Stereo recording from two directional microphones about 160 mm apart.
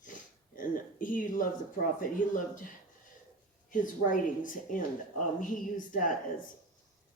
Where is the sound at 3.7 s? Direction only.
55° left (ahead or behind).